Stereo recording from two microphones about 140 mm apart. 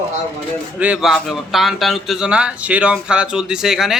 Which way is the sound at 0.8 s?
5° right (ahead or behind).